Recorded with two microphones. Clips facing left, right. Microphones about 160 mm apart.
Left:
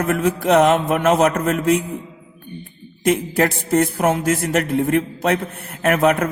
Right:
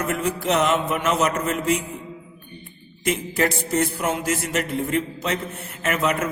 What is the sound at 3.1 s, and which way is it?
A man's voice, 55° left (ahead or behind).